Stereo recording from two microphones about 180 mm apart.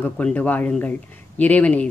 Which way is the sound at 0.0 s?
10° left (ahead or behind).